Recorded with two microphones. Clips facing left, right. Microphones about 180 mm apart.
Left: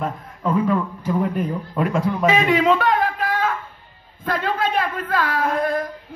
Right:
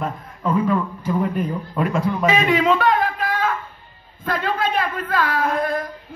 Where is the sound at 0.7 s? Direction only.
50° left (ahead or behind).